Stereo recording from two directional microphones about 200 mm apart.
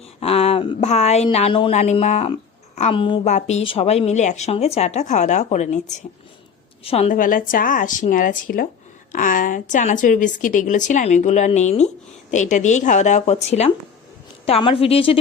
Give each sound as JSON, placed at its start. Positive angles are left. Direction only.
{"t": 0.2, "sound": "a woman's voice", "side_deg": 30}